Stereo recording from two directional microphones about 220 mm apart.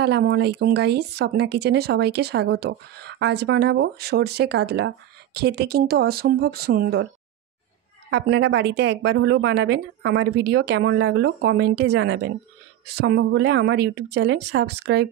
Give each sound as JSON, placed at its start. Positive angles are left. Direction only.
{"t": 0.0, "sound": "speech", "side_deg": -50}
{"t": 8.1, "sound": "speech", "side_deg": -55}